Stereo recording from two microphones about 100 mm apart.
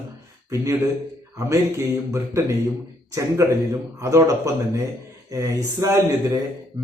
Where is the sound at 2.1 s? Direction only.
30° right (ahead or behind).